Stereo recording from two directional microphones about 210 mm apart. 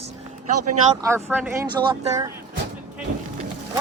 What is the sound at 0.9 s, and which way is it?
Speech, 15° right (ahead or behind).